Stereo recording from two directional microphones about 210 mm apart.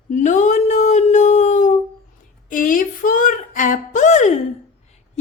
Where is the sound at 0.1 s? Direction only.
35° left (ahead or behind).